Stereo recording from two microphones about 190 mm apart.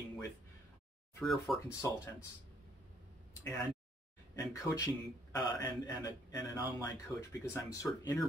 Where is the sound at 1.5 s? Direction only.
Centre (ahead or behind).